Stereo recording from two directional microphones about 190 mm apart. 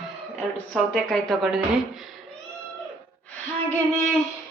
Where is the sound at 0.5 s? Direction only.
5° left (ahead or behind).